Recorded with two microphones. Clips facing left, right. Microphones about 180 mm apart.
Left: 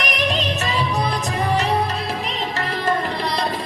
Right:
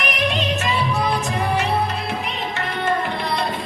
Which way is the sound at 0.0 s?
35° left (ahead or behind).